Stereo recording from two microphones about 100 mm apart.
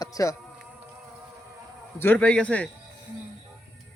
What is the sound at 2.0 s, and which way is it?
Speech, 15° left (ahead or behind).